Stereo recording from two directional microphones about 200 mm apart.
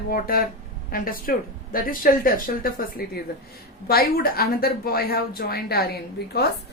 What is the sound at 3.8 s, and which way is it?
A woman's voice, 50° left (ahead or behind).